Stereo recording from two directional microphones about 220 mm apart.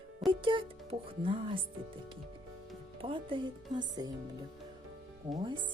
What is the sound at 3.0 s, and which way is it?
Speech, 25° right (ahead or behind).